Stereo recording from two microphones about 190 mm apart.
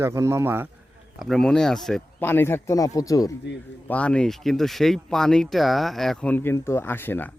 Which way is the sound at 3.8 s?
5° left (ahead or behind).